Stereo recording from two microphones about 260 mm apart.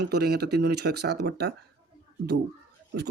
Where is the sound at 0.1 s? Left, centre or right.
Right.